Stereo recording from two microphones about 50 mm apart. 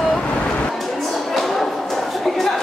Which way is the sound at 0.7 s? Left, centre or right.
Centre.